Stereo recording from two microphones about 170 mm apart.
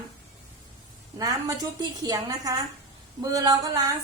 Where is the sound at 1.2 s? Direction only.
20° right (ahead or behind).